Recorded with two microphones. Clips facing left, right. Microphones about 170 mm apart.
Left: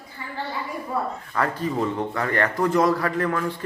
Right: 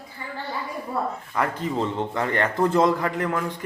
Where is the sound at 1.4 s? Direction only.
20° right (ahead or behind).